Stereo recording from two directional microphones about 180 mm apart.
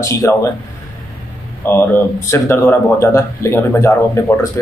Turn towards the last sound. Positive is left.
turn(degrees=15)  # may be behind; listen again after turning